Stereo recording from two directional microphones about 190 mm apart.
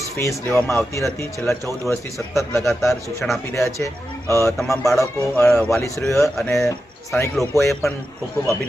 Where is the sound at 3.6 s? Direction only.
15° left (ahead or behind).